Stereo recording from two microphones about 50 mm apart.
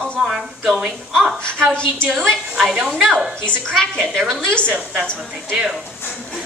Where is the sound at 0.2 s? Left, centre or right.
Centre.